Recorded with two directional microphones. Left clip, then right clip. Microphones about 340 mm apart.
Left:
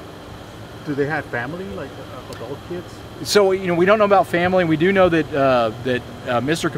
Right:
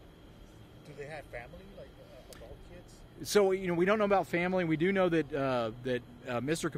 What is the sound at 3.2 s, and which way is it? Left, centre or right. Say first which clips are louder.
Speech: left 12 dB; right.